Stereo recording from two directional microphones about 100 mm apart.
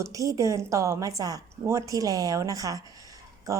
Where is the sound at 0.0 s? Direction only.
35° right (ahead or behind).